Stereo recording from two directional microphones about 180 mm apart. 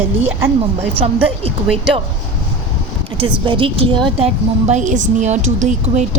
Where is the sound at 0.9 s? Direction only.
35° right (ahead or behind).